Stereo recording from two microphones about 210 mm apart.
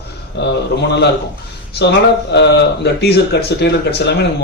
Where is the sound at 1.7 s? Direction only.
55° left (ahead or behind).